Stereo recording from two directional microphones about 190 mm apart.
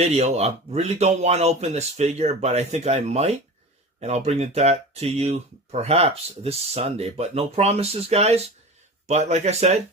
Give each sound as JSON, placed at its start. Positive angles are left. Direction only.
{"t": 0.0, "sound": "speech", "side_deg": -35}